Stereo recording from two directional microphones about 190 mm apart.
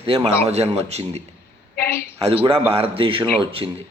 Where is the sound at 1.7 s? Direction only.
55° left (ahead or behind).